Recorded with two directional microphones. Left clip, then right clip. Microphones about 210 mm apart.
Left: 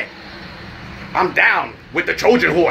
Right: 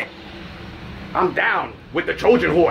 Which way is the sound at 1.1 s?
Centre (ahead or behind).